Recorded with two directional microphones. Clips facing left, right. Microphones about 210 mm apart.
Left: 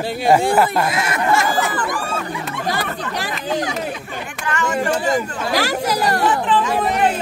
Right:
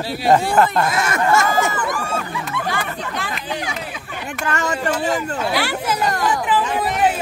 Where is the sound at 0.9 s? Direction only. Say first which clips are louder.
Right 1 dB; 45° right (ahead or behind).